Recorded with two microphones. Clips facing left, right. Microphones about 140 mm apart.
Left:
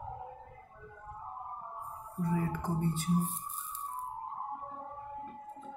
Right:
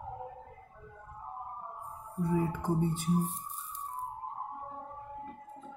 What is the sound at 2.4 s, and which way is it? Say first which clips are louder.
Speech: right 3 dB; 15° right (ahead or behind).